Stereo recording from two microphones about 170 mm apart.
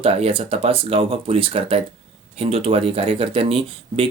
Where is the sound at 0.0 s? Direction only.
35° right (ahead or behind).